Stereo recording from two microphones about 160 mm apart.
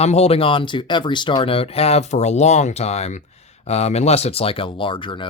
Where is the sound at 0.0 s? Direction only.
40° left (ahead or behind).